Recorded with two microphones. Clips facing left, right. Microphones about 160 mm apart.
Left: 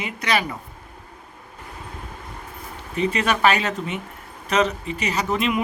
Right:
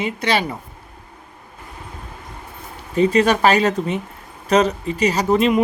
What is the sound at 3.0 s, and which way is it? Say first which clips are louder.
Speech: right 6 dB; 35° right (ahead or behind).